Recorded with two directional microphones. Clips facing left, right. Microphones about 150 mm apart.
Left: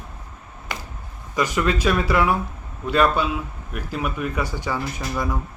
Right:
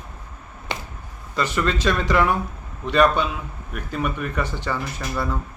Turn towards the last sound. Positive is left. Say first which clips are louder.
# even
turn(degrees=10)  # may be behind; listen again after turning